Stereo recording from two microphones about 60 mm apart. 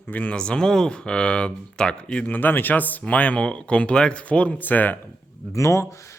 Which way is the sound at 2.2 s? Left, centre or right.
Left.